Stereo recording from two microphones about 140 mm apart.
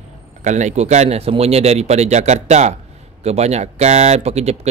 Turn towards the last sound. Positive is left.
turn(degrees=-50)  # may be behind; listen again after turning